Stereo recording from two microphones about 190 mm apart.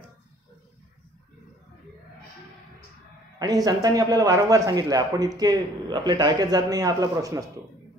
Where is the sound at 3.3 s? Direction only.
20° right (ahead or behind).